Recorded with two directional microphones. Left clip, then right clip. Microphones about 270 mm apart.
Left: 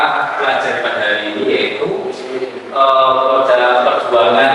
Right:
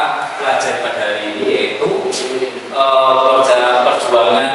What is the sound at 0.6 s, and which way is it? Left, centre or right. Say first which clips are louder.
Speech: left 1 dB; centre.